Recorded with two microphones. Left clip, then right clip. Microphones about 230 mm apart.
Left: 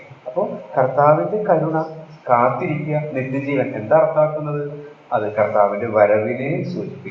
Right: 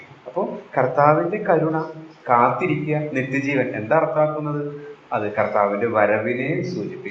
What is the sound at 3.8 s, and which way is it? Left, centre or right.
A man's voice, right.